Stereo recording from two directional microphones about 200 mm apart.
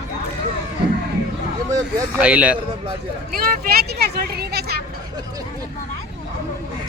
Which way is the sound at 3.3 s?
45° right (ahead or behind).